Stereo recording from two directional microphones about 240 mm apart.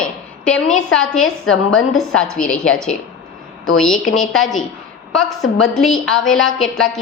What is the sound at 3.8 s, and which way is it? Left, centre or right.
Speech, centre.